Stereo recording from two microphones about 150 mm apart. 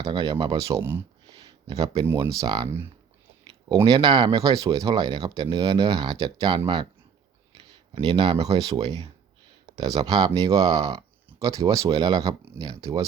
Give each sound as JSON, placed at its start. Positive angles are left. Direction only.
{"t": 0.0, "sound": "speech", "side_deg": -30}
{"t": 1.4, "sound": "a sound", "side_deg": -25}
{"t": 2.2, "sound": "speech", "side_deg": -20}
{"t": 3.7, "sound": "speech", "side_deg": -20}
{"t": 8.0, "sound": "speech", "side_deg": -35}